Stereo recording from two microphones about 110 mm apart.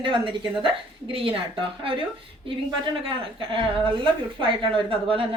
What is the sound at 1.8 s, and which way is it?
A woman's voice, 55° right (ahead or behind).